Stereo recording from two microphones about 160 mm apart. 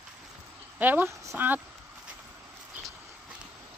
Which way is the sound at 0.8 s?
10° right (ahead or behind).